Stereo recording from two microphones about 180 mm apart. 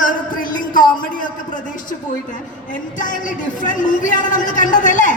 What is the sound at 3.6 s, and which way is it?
Music, 45° left (ahead or behind).